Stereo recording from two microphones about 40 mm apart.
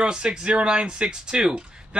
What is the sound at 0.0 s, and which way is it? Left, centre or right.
Speech, right.